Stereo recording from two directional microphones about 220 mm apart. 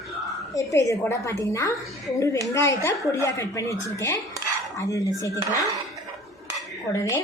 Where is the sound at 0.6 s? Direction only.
15° left (ahead or behind).